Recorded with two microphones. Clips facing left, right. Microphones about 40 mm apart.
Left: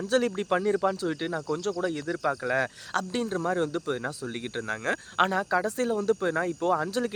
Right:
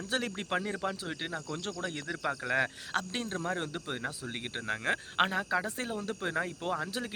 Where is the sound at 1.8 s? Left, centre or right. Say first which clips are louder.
Left 4 dB; right.